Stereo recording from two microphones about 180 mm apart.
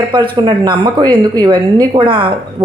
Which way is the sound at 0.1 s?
25° right (ahead or behind).